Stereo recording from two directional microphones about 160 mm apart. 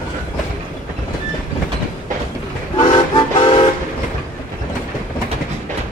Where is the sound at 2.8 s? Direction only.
30° left (ahead or behind).